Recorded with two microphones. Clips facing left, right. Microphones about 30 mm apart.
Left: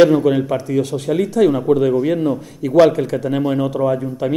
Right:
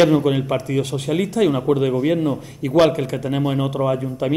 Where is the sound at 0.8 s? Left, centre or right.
Right.